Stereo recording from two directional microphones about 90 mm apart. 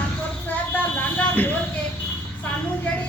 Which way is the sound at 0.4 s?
20° left (ahead or behind).